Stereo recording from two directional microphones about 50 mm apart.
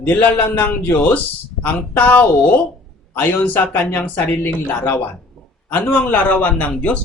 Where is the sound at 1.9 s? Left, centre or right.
Left.